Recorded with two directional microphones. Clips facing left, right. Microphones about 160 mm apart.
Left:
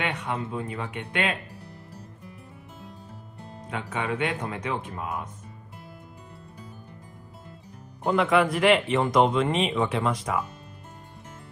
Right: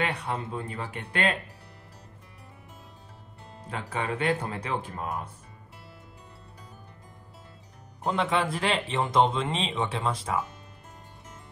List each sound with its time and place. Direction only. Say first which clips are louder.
0.0 s speech: even; 35° right (ahead or behind)
3.7 s speech: left 2 dB; 35° right (ahead or behind)
8.1 s speech: left 5 dB; 30° right (ahead or behind)